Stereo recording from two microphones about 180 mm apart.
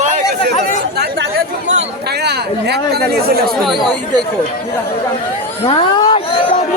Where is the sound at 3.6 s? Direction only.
Centre (ahead or behind).